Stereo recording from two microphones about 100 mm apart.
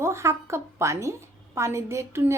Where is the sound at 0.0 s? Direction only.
30° right (ahead or behind).